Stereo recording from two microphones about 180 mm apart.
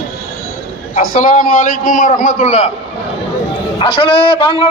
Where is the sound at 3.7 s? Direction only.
30° left (ahead or behind).